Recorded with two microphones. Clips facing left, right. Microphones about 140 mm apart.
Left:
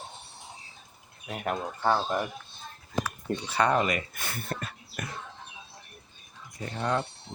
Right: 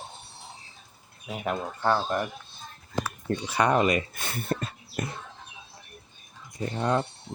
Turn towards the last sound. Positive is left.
turn(degrees=-20)  # may be behind; listen again after turning